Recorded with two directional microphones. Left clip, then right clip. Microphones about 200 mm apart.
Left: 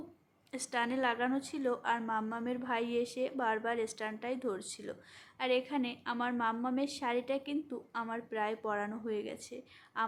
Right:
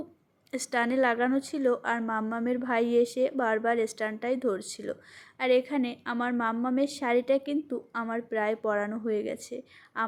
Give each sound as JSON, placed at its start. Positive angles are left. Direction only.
{"t": 0.5, "sound": "a woman's voice", "side_deg": -20}